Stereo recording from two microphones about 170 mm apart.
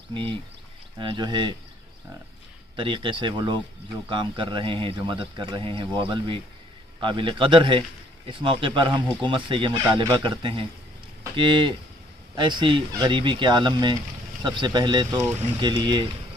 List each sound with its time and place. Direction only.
0.1 s a man's voice: 30° right (ahead or behind)
2.7 s a man's voice: 30° right (ahead or behind)